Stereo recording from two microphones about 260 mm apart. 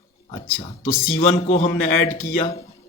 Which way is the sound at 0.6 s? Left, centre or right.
Left.